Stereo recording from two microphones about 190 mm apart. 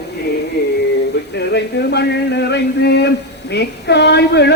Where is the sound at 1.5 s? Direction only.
60° left (ahead or behind).